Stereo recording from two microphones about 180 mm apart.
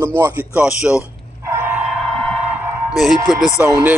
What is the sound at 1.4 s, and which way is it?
Vehicle, 15° right (ahead or behind).